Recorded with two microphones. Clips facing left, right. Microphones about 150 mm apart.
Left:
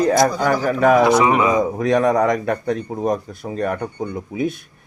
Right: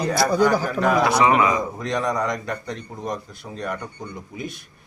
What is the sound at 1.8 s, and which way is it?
A man's voice, 60° left (ahead or behind).